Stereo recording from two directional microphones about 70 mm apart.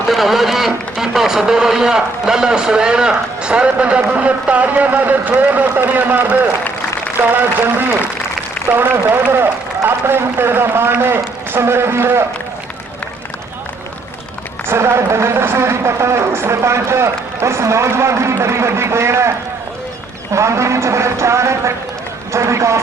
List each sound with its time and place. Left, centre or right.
0.1 s a man's voice: centre; by 12.2 s right
14.7 s speech: right
20.3 s speech: right